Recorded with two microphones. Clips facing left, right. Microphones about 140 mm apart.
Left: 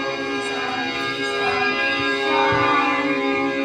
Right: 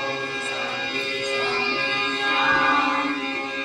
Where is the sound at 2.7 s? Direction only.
65° left (ahead or behind).